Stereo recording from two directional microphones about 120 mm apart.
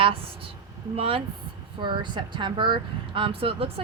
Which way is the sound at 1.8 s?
40° right (ahead or behind).